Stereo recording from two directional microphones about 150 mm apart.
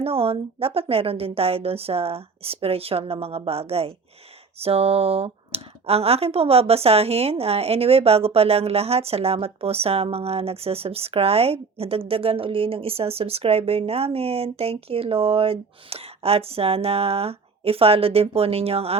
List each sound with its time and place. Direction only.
0.0 s speech: 40° right (ahead or behind)